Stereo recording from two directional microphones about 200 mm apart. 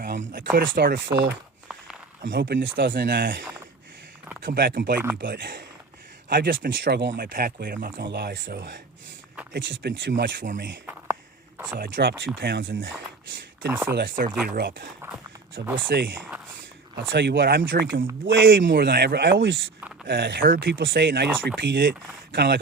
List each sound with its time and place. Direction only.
0.0 s a sound: 55° right (ahead or behind)
0.7 s speech: 55° right (ahead or behind)
4.4 s speech: 45° right (ahead or behind)
7.3 s speech: 45° right (ahead or behind)
7.9 s speech: 60° right (ahead or behind)
9.8 s speech: 65° right (ahead or behind)
10.8 s whispering: 10° right (ahead or behind)
11.8 s speech: 50° right (ahead or behind)
13.7 s speech: 10° right (ahead or behind)
14.4 s speech: 50° right (ahead or behind)